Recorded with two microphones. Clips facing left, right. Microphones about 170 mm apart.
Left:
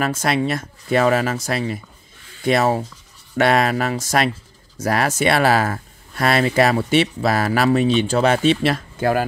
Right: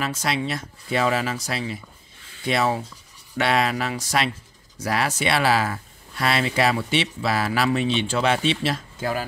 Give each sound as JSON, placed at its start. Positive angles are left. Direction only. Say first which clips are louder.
{"t": 0.0, "sound": "speech", "louder": "left 6 dB", "side_deg": 50}